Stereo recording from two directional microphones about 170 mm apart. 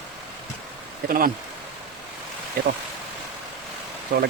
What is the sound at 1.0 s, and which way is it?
Speech, 55° right (ahead or behind).